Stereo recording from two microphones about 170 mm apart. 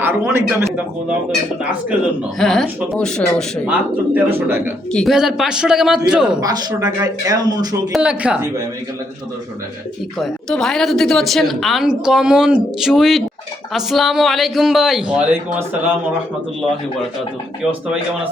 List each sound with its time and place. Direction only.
0.0 s a man's voice: 15° right (ahead or behind)
2.4 s speech: centre (ahead or behind)
3.7 s a man's voice: 10° right (ahead or behind)
4.9 s speech: centre (ahead or behind)
6.4 s speech: 25° right (ahead or behind)
7.9 s a man's voice: 5° right (ahead or behind)
10.2 s speech: centre (ahead or behind)